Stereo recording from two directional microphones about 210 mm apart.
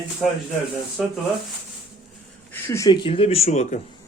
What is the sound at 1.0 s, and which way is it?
Speech, centre (ahead or behind).